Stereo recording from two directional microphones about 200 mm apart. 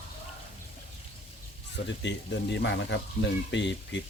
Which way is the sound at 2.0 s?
60° left (ahead or behind).